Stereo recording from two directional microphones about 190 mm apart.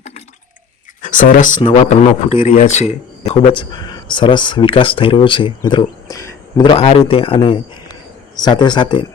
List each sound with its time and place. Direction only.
1.0 s a man's voice: 45° left (ahead or behind)
3.2 s speech: 25° left (ahead or behind)